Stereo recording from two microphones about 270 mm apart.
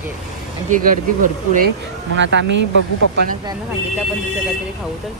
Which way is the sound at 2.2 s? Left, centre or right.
Right.